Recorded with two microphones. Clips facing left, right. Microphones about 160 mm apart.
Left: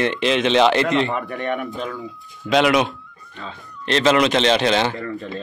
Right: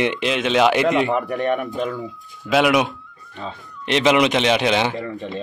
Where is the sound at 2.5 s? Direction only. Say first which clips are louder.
Even; 5° right (ahead or behind).